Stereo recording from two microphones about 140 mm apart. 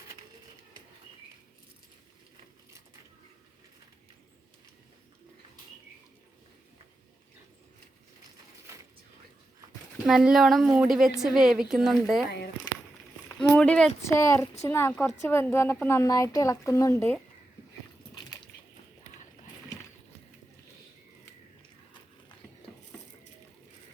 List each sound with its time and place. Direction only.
10.1 s a woman's voice: centre (ahead or behind)
13.2 s a sound: 20° left (ahead or behind)
13.6 s a woman's voice: 5° left (ahead or behind)
14.0 s a woman's voice: 20° left (ahead or behind)